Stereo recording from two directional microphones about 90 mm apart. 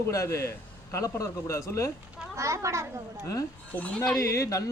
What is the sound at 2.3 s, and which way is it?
Speech, 35° right (ahead or behind).